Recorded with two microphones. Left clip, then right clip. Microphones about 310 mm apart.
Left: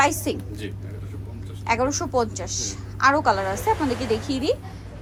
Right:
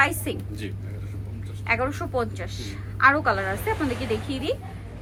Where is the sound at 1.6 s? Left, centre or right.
Centre.